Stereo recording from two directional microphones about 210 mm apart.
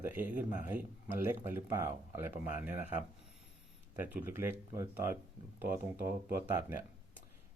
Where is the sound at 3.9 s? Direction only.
10° right (ahead or behind).